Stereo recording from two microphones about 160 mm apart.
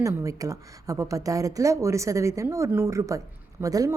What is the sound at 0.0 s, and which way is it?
A woman's voice, 20° right (ahead or behind).